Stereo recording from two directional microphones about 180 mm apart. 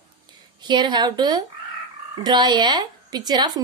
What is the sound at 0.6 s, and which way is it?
A woman's voice, 25° right (ahead or behind).